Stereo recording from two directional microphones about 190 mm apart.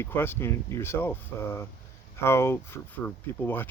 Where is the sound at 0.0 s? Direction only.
10° left (ahead or behind).